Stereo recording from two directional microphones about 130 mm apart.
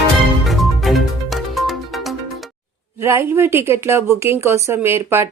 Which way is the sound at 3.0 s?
20° right (ahead or behind).